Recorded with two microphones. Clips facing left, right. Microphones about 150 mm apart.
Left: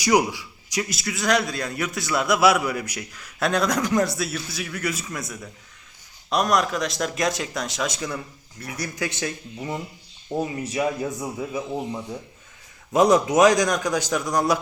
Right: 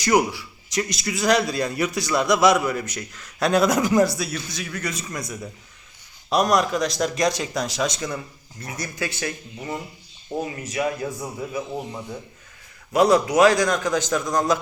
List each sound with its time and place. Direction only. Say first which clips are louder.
0.0 s a man's voice: even; 15° left (ahead or behind)
8.8 s a man's voice: left 1 dB; 15° left (ahead or behind)
10.6 s a man's voice: left 1 dB; 30° left (ahead or behind)
11.2 s a man's voice: left 1 dB; 15° left (ahead or behind)
12.9 s a man's voice: even; 20° left (ahead or behind)